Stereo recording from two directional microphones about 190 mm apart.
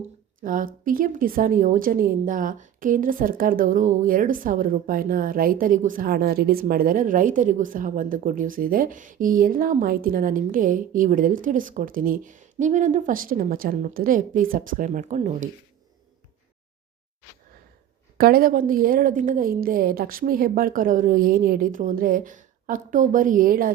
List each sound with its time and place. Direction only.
0.4 s a woman's voice: 45° right (ahead or behind)
18.2 s a woman's voice: 50° right (ahead or behind)